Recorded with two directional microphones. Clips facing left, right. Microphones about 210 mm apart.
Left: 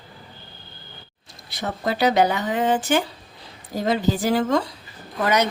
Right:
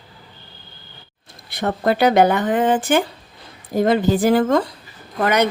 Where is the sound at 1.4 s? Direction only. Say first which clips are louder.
Right 6 dB; 55° right (ahead or behind).